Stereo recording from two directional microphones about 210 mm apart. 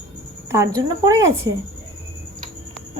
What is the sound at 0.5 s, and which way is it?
Speech, 15° right (ahead or behind).